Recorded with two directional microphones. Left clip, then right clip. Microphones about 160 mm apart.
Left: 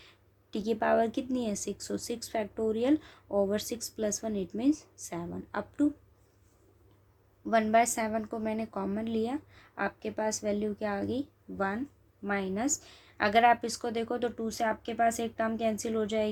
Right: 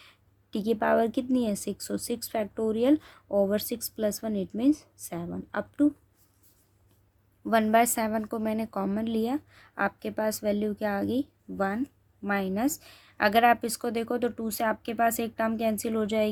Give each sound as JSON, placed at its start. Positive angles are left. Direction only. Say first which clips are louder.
{"t": 0.0, "sound": "a woman's voice", "louder": "right 2 dB", "side_deg": -45}
{"t": 7.4, "sound": "speech", "louder": "right 2 dB", "side_deg": -50}